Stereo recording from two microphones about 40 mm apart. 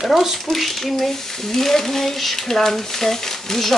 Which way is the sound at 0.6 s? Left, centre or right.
Centre.